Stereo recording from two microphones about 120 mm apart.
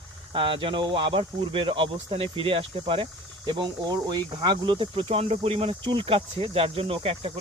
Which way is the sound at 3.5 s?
35° right (ahead or behind).